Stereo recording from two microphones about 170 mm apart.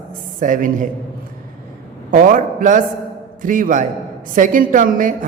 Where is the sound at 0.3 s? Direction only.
50° right (ahead or behind).